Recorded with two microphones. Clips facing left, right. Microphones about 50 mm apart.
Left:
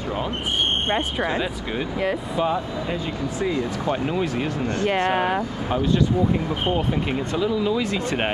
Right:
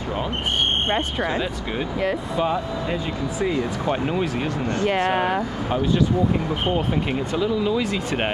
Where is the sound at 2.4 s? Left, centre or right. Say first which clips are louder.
Even; centre.